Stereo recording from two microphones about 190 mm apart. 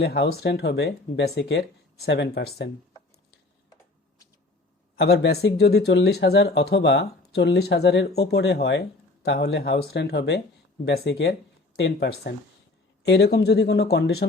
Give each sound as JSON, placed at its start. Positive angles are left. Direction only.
{"t": 0.0, "sound": "speech", "side_deg": 60}
{"t": 4.9, "sound": "speech", "side_deg": 60}